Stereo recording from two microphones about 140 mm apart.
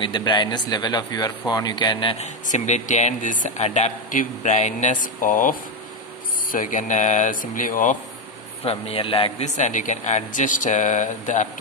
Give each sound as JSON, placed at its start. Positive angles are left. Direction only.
{"t": 0.0, "sound": "speech", "side_deg": 35}
{"t": 2.1, "sound": "speech", "side_deg": 60}
{"t": 5.0, "sound": "speech", "side_deg": 70}
{"t": 8.6, "sound": "speech", "side_deg": 45}
{"t": 9.4, "sound": "speech", "side_deg": 60}